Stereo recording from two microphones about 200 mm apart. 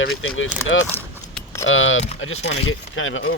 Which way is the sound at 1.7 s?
75° left (ahead or behind).